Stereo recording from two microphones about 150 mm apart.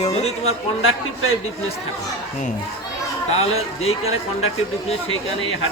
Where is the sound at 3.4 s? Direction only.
45° left (ahead or behind).